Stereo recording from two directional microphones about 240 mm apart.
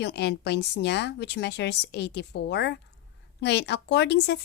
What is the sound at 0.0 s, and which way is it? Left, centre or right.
Speech, left.